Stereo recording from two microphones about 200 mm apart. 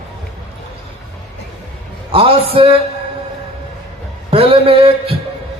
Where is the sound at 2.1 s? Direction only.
25° right (ahead or behind).